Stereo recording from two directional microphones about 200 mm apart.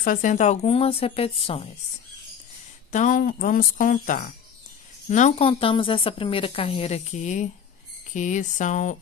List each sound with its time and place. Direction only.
0.0 s a woman's voice: 40° left (ahead or behind)
2.9 s a woman's voice: 40° left (ahead or behind)